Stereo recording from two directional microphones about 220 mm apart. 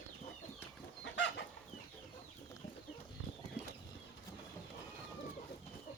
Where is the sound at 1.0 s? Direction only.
55° left (ahead or behind).